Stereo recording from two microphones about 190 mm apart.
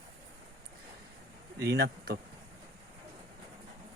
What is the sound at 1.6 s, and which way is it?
Speech, 60° right (ahead or behind).